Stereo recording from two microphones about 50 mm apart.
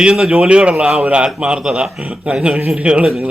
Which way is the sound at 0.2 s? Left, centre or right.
Centre.